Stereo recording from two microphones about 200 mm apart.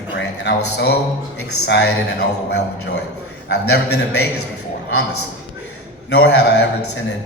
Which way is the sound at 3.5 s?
55° left (ahead or behind).